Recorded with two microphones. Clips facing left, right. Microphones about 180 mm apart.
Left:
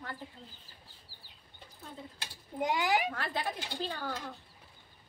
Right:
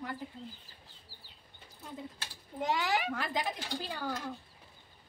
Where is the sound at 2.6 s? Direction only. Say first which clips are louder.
Left 2 dB; 15° left (ahead or behind).